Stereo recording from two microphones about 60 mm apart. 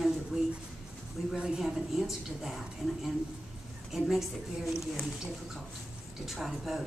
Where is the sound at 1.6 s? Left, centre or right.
Centre.